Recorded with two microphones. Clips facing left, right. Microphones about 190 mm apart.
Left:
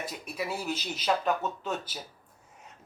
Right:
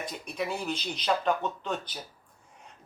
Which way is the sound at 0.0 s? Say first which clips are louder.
Right 1 dB; 5° left (ahead or behind).